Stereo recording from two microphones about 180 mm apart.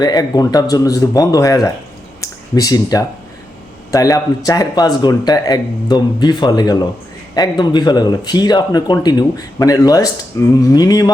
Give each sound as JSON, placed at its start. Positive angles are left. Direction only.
{"t": 0.0, "sound": "speech", "side_deg": 20}